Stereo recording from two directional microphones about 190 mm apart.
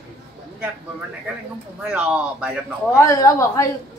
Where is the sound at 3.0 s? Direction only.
15° left (ahead or behind).